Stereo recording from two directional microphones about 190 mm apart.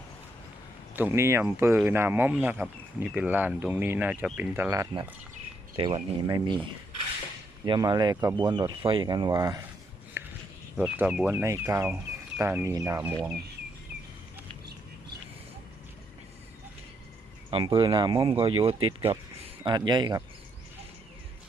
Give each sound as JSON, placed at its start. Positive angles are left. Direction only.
{"t": 0.9, "sound": "speech", "side_deg": -10}
{"t": 7.6, "sound": "speech", "side_deg": -20}
{"t": 10.2, "sound": "a sound", "side_deg": -10}
{"t": 10.8, "sound": "speech", "side_deg": -5}
{"t": 17.5, "sound": "speech", "side_deg": -25}